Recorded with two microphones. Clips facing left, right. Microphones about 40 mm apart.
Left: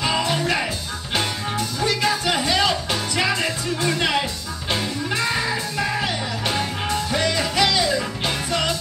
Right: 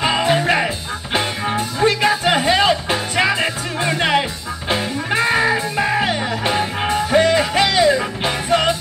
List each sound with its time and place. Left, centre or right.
0.0 s music: right